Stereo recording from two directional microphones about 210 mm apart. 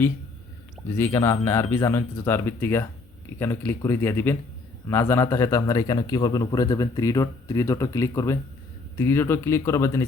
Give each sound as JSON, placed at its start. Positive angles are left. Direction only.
{"t": 0.9, "sound": "a man's voice", "side_deg": 10}